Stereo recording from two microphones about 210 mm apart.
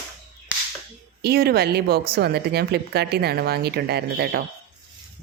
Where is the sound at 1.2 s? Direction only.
50° right (ahead or behind).